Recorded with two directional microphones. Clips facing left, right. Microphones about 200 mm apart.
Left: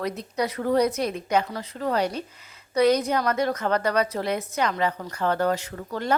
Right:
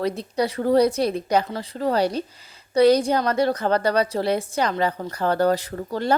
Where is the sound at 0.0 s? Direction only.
30° right (ahead or behind).